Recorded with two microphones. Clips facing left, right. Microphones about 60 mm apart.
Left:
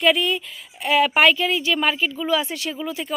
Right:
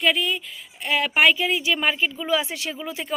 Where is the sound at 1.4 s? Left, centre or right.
Centre.